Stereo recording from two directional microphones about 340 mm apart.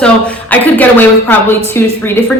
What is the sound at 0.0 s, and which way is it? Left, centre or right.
A woman's voice, centre.